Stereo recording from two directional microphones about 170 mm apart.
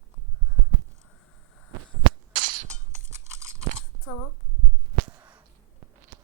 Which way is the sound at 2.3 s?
50° right (ahead or behind).